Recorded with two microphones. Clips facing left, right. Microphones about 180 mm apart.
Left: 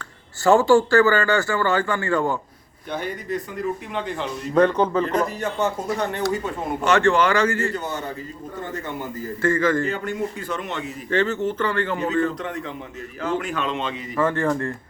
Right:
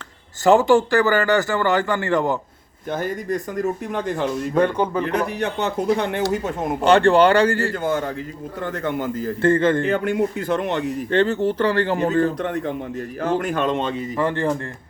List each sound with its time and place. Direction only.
0.4 s a man's voice: 20° right (ahead or behind)
2.9 s speech: 45° right (ahead or behind)
4.5 s a man's voice: 10° right (ahead or behind)
5.4 s speech: 65° right (ahead or behind)
6.8 s speech: 30° right (ahead or behind)
8.8 s a man's voice: 90° right
9.4 s a man's voice: 30° right (ahead or behind)
9.8 s speech: 65° right (ahead or behind)
11.1 s speech: 30° right (ahead or behind)
14.2 s a man's voice: 15° right (ahead or behind)